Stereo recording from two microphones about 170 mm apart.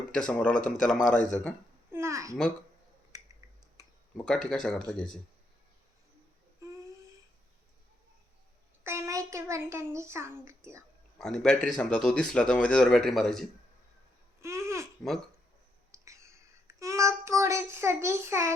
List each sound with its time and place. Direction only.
0.1 s speech: 5° left (ahead or behind)
1.9 s babbling: 15° right (ahead or behind)
3.1 s finger snapping: 20° right (ahead or behind)
4.4 s speech: 5° left (ahead or behind)
8.8 s a child's voice: 15° right (ahead or behind)
11.2 s speech: 5° left (ahead or behind)
14.4 s babbling: 15° right (ahead or behind)
15.9 s a sound: 20° right (ahead or behind)